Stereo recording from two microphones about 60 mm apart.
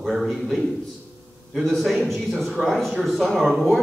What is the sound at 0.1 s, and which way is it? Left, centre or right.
Speech, centre.